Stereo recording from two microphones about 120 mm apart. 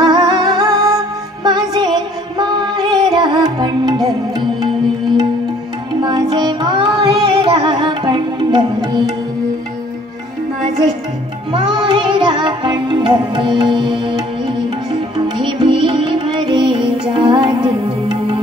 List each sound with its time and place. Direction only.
0.0 s music: 35° right (ahead or behind)
6.0 s carnatic music: 35° right (ahead or behind)
11.7 s music: 40° right (ahead or behind)